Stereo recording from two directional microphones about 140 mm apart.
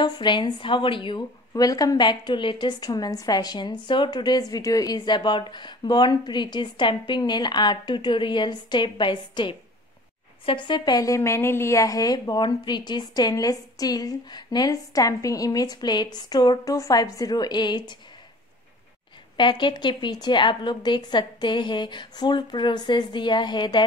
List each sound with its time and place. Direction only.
0.0 s a woman's voice: 30° left (ahead or behind)
1.5 s a woman's voice: 25° left (ahead or behind)
19.3 s a woman's voice: 35° left (ahead or behind)